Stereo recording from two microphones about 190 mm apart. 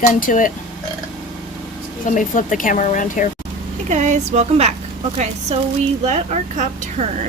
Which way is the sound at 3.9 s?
40° right (ahead or behind).